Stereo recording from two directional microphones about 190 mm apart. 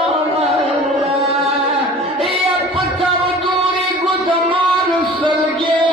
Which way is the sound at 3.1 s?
25° right (ahead or behind).